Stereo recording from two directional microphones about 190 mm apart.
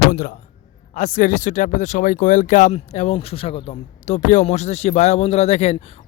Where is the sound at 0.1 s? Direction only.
45° left (ahead or behind).